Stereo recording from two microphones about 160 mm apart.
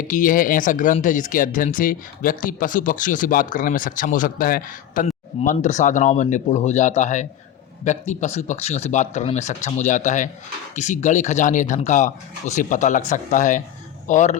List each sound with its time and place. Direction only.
0.0 s a man's voice: 55° left (ahead or behind)